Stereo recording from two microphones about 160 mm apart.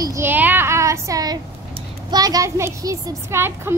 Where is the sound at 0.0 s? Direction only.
15° right (ahead or behind).